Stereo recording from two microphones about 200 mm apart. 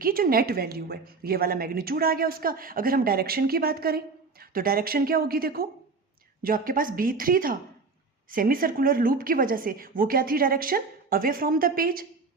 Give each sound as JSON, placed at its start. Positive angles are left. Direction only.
{"t": 0.0, "sound": "speech", "side_deg": -45}